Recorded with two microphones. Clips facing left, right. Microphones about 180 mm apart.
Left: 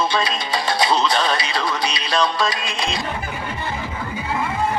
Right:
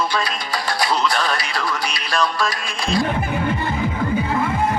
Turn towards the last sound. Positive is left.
turn(degrees=20)  # may be behind; listen again after turning